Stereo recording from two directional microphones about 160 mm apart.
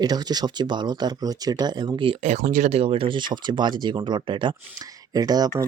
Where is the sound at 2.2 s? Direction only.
50° right (ahead or behind).